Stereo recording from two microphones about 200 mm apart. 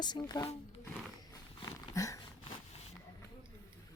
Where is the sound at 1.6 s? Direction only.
15° left (ahead or behind).